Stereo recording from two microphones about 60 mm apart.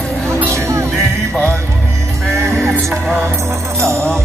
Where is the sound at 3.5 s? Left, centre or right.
Right.